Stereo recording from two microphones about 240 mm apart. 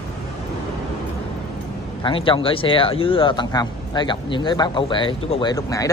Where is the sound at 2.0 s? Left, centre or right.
Left.